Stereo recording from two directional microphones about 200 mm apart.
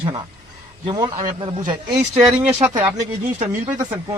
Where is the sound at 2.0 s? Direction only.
10° right (ahead or behind).